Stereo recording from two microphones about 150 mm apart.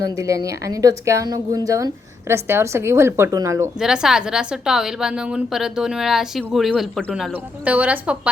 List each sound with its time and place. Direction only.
0.0 s speech: 20° right (ahead or behind)
3.8 s a woman's voice: 5° right (ahead or behind)